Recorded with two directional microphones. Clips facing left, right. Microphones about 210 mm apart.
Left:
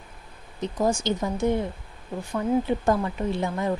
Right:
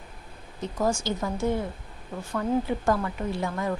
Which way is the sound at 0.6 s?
15° left (ahead or behind).